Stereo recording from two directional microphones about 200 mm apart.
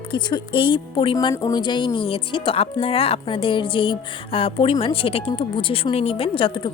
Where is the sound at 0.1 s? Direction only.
20° left (ahead or behind).